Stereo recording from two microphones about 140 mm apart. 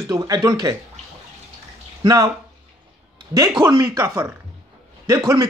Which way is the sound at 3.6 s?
25° right (ahead or behind).